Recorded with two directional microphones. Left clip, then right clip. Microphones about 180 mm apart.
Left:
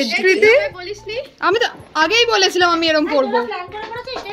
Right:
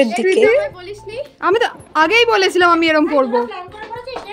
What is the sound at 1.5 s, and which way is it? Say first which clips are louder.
Speech: right 2 dB; 40° right (ahead or behind).